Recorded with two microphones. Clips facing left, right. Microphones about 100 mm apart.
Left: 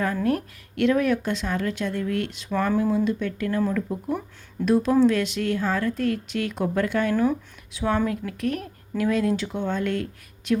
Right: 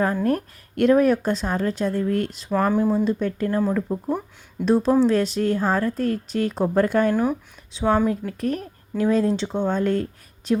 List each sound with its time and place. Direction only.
0.0 s speech: 35° right (ahead or behind)
2.6 s speech: 25° right (ahead or behind)
2.9 s speech: 35° right (ahead or behind)
7.1 s speech: 20° right (ahead or behind); by 10.6 s 35° right (ahead or behind)